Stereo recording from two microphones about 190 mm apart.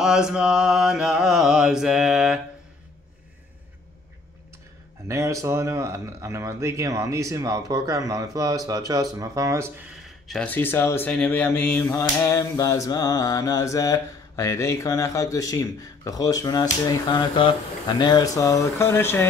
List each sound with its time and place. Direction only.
0.0 s mantra: 5° right (ahead or behind)
5.0 s speech: 15° right (ahead or behind)
10.0 s speech: centre (ahead or behind)